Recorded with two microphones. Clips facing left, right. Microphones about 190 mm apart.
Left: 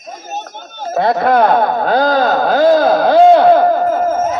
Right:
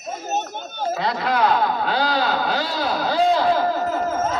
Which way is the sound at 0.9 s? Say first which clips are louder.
Left 11 dB; 50° left (ahead or behind).